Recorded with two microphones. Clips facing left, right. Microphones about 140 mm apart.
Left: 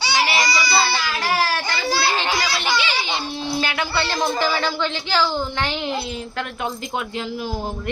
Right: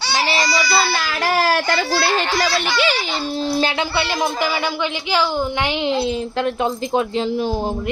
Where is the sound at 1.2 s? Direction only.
55° right (ahead or behind).